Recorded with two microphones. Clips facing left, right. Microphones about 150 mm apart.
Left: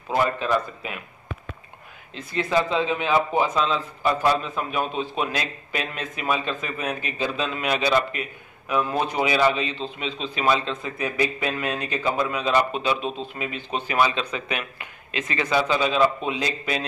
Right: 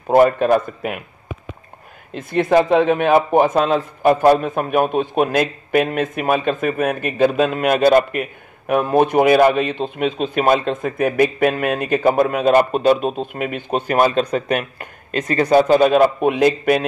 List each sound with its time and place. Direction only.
0.1 s speech: 55° right (ahead or behind)
2.1 s a man's voice: 55° right (ahead or behind)